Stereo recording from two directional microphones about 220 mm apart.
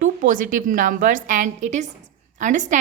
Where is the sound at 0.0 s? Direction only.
35° right (ahead or behind).